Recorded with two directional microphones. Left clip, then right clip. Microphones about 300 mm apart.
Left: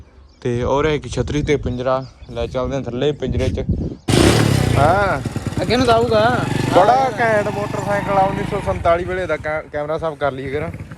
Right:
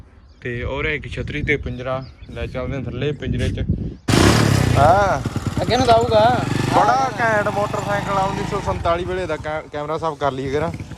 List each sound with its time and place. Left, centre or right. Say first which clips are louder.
0.4 s speech: left 6 dB; centre
4.4 s vehicle: even; centre
5.5 s speech: even; centre
6.4 s speech: left 3 dB; centre